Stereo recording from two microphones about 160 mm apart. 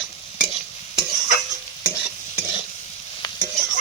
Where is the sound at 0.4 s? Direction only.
35° left (ahead or behind).